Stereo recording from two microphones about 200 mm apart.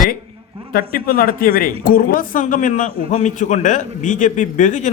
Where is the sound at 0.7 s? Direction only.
45° left (ahead or behind).